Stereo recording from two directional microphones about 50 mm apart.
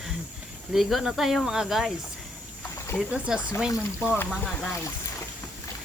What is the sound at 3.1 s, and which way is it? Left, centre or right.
Speech, centre.